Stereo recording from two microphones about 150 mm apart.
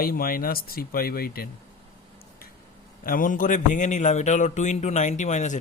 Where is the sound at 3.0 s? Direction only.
65° left (ahead or behind).